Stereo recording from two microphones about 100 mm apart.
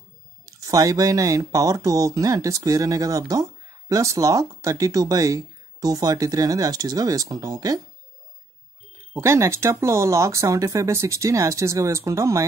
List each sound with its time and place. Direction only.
0.5 s speech: 35° right (ahead or behind)
9.1 s speech: 30° right (ahead or behind)